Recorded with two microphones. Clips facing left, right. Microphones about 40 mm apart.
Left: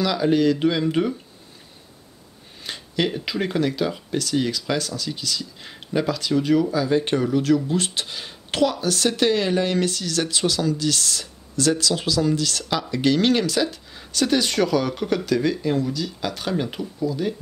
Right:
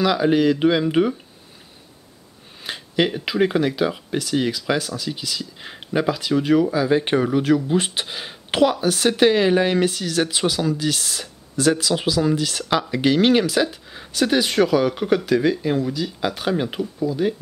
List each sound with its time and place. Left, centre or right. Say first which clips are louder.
0.0 s speech: right 2 dB; centre
2.6 s speech: right 3 dB; centre